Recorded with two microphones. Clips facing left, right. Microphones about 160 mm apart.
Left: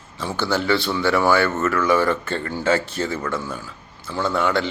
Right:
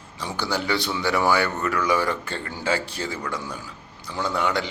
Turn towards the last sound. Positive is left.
turn(degrees=-15)  # may be behind; listen again after turning